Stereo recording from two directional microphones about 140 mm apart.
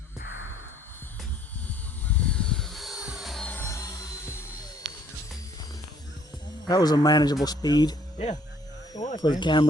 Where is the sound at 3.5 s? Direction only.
20° left (ahead or behind).